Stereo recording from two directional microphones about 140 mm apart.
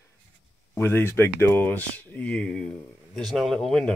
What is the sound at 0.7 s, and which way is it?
Speech, 15° left (ahead or behind).